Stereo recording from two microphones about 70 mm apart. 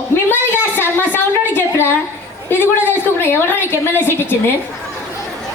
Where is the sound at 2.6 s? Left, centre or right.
Left.